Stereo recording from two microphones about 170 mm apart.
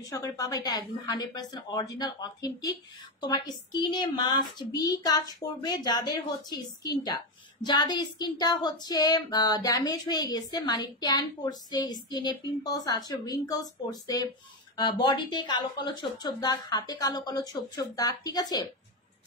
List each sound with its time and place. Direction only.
0.1 s a woman's voice: 20° left (ahead or behind)